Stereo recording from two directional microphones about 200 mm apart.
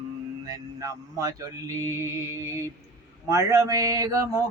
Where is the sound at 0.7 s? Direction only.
15° right (ahead or behind).